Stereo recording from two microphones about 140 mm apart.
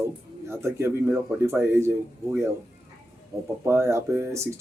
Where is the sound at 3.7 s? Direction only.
20° right (ahead or behind).